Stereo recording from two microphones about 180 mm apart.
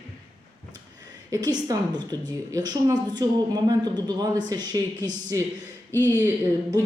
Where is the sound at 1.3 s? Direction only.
20° right (ahead or behind).